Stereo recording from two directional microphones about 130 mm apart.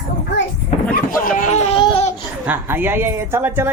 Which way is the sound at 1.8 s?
50° left (ahead or behind).